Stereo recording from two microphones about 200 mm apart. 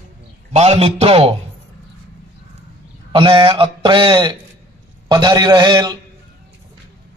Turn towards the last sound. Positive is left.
turn(degrees=-20)  # may be behind; listen again after turning